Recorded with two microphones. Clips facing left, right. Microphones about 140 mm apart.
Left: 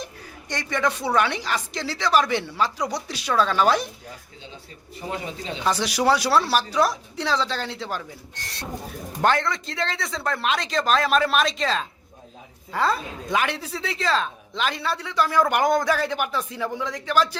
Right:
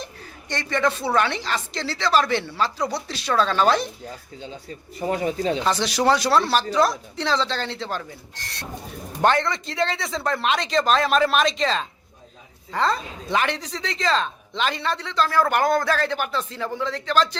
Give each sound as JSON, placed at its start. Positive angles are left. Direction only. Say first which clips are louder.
{"t": 0.0, "sound": "a man's voice", "louder": "even", "side_deg": 10}
{"t": 4.9, "sound": "speech", "louder": "right 7 dB", "side_deg": -40}
{"t": 5.6, "sound": "a man's voice", "louder": "left 1 dB", "side_deg": 10}
{"t": 9.2, "sound": "a man's voice", "louder": "right 2 dB", "side_deg": 0}